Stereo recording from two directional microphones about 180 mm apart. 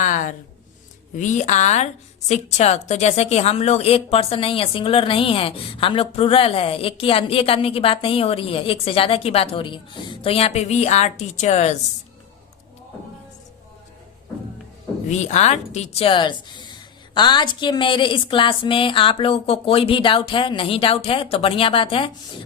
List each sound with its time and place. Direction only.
0.0 s a sound: 45° left (ahead or behind)
1.1 s a woman's voice: 45° left (ahead or behind)
15.1 s a woman's voice: 40° left (ahead or behind)